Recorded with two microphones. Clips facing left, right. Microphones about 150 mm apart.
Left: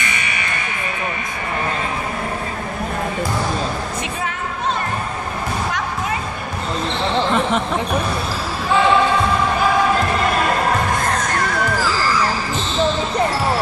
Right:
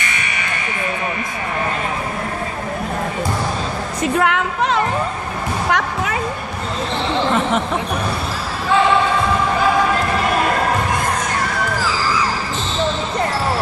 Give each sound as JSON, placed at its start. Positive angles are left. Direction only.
{"t": 4.2, "sound": "music", "side_deg": -80}
{"t": 5.7, "sound": "music", "side_deg": -70}